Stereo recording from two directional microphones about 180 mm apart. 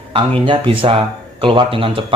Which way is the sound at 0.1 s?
30° right (ahead or behind).